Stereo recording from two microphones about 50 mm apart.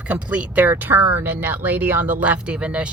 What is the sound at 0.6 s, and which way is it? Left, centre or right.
Speech, right.